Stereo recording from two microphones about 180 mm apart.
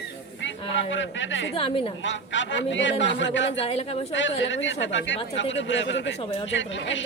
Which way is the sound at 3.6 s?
30° left (ahead or behind).